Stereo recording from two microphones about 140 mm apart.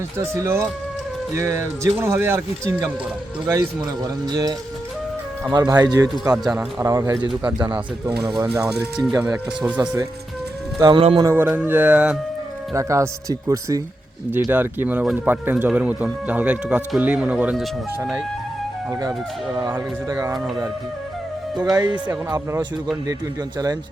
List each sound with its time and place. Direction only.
0.2 s speech: 20° right (ahead or behind)
5.5 s speech: 30° right (ahead or behind)
6.3 s speech: 5° right (ahead or behind); by 7.3 s 25° right (ahead or behind)
7.4 s speech: 10° right (ahead or behind)
9.8 s speech: 25° right (ahead or behind)
11.2 s speech: 15° right (ahead or behind)
12.7 s speech: 20° right (ahead or behind)
18.9 s speech: 25° right (ahead or behind)
21.6 s speech: 10° right (ahead or behind)